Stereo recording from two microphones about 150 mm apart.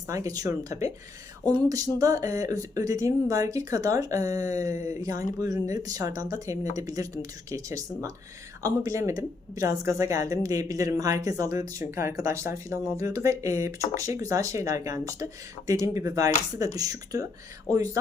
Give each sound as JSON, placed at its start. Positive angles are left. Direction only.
{"t": 0.1, "sound": "speech", "side_deg": -20}